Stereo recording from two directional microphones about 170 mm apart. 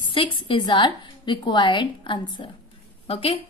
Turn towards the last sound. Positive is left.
turn(degrees=35)  # may be behind; listen again after turning